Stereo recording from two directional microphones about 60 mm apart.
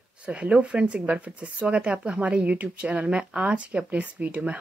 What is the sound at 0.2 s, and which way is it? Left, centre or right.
Speech, centre.